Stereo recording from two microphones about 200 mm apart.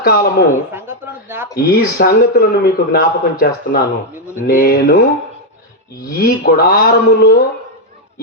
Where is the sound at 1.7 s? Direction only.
50° left (ahead or behind).